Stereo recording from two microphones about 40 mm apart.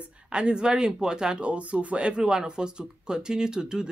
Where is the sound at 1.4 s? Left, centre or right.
Right.